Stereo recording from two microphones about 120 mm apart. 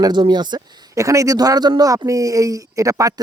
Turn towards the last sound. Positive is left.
turn(degrees=-30)  # may be behind; listen again after turning